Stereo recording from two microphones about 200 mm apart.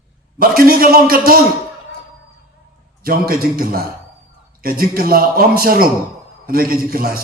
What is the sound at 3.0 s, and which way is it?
Speech, 50° right (ahead or behind).